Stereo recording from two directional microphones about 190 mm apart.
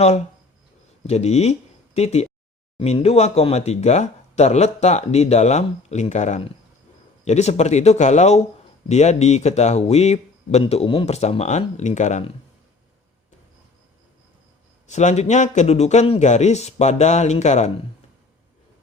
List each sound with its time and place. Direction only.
1.0 s speech: 35° left (ahead or behind)
14.8 s speech: 40° left (ahead or behind)